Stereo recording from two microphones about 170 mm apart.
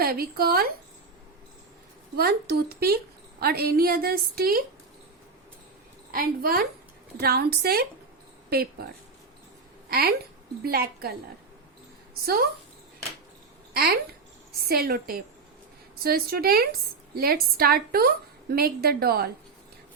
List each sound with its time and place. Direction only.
0.0 s a woman's voice: 65° right (ahead or behind)
2.1 s a woman's voice: 65° right (ahead or behind)
6.1 s a woman's voice: 60° right (ahead or behind)
9.9 s a woman's voice: 65° right (ahead or behind)
13.7 s a woman's voice: 65° right (ahead or behind)